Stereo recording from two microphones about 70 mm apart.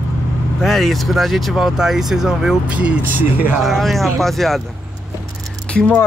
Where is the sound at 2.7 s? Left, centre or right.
Centre.